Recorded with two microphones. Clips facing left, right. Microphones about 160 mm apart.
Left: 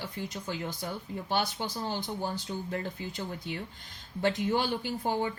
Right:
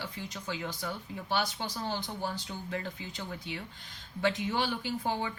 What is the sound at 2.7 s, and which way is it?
Speech, 45° left (ahead or behind).